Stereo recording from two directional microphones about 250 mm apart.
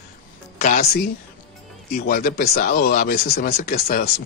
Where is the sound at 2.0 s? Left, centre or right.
Left.